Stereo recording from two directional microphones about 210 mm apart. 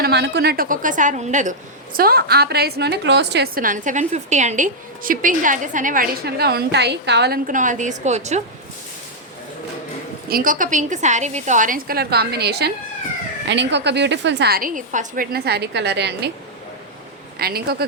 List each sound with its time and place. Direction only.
0.0 s a woman's voice: 55° right (ahead or behind); by 8.4 s 35° right (ahead or behind)
10.2 s a woman's voice: 40° right (ahead or behind)
17.3 s a woman's voice: 45° right (ahead or behind)